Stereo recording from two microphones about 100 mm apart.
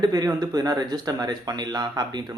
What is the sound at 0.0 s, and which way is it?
Speech, 40° right (ahead or behind).